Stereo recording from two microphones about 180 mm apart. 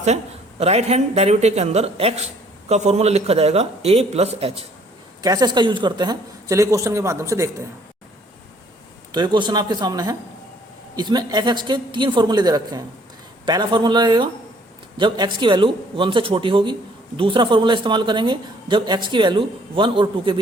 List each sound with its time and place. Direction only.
0.6 s speech: 35° right (ahead or behind)
5.2 s speech: 20° right (ahead or behind)
9.1 s speech: 25° right (ahead or behind)